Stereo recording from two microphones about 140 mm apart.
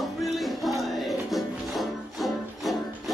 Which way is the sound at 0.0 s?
Centre (ahead or behind).